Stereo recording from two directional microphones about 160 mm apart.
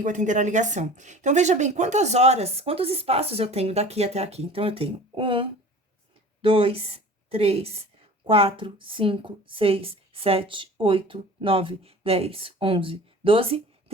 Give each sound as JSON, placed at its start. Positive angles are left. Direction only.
{"t": 0.0, "sound": "a woman's voice", "side_deg": -50}